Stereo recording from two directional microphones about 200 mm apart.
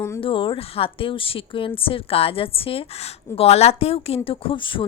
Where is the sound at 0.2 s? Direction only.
25° left (ahead or behind).